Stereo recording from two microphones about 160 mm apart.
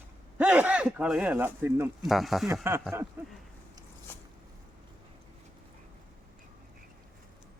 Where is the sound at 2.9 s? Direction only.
15° right (ahead or behind).